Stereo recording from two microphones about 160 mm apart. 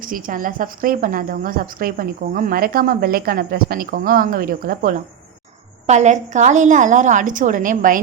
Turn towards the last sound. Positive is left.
turn(degrees=-55)  # may be behind; listen again after turning